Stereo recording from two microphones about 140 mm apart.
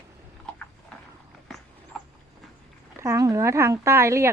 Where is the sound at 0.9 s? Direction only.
5° left (ahead or behind).